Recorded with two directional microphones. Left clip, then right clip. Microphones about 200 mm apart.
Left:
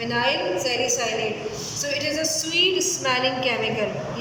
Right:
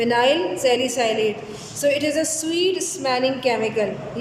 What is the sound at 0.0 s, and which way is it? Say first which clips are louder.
A woman's voice: right 5 dB; 35° right (ahead or behind).